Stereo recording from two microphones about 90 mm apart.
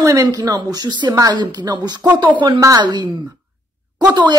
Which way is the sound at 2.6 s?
40° right (ahead or behind).